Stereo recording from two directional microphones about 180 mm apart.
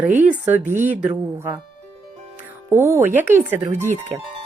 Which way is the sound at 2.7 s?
15° right (ahead or behind).